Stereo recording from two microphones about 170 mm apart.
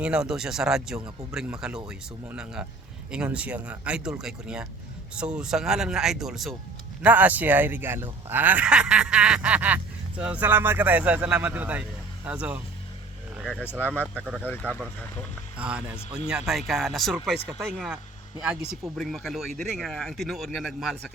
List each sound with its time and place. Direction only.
0.0 s speech: 5° right (ahead or behind)
13.3 s vehicle: 5° right (ahead or behind)
13.6 s speech: 10° left (ahead or behind)
15.5 s speech: 5° right (ahead or behind)